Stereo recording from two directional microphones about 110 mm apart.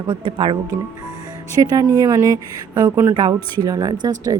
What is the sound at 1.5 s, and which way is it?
Speech, 35° right (ahead or behind).